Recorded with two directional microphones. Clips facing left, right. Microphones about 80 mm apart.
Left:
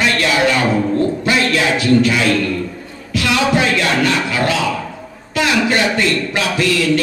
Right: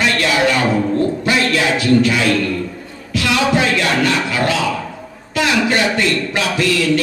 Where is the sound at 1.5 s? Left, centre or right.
Left.